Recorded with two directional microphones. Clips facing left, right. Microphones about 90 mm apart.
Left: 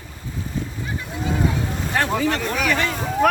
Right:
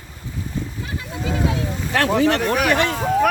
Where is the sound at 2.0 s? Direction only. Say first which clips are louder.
Right 4 dB; 70° right (ahead or behind).